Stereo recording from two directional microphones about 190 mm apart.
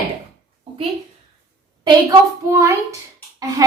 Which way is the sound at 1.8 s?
20° right (ahead or behind).